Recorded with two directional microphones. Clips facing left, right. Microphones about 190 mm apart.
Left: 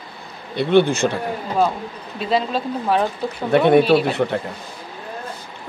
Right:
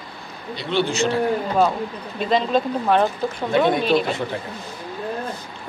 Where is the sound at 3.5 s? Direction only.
65° left (ahead or behind).